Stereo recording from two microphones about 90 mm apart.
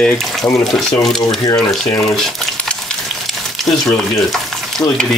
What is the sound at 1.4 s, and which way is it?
Speech, 40° left (ahead or behind).